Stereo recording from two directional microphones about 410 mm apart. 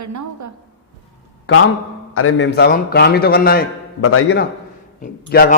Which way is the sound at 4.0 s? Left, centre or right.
Left.